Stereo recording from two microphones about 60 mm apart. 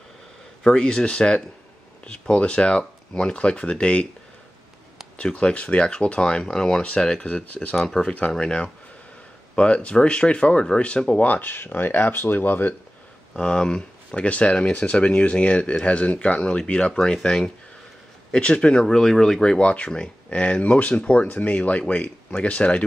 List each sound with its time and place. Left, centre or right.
0.7 s speech: centre
5.1 s speech: centre
11.2 s speech: left
13.4 s speech: centre
19.6 s speech: left